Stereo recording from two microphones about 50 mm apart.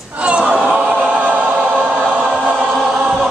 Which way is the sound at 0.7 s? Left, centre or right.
Centre.